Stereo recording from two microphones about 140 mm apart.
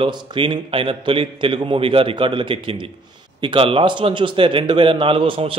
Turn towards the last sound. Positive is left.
turn(degrees=-40)  # may be behind; listen again after turning